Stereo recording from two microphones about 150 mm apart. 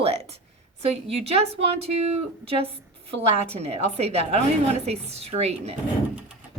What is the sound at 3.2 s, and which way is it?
A woman's voice, 40° right (ahead or behind).